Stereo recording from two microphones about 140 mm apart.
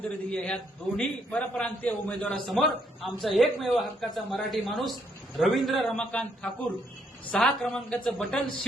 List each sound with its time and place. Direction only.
0.0 s a man's voice: 10° left (ahead or behind)
2.5 s speech: centre (ahead or behind)